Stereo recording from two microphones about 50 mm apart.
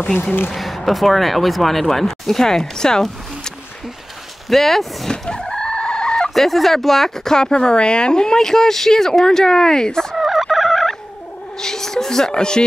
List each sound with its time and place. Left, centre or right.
0.5 s speech: centre
5.1 s chicken: centre
6.3 s speech: centre
10.1 s turkey: centre
11.6 s speech: centre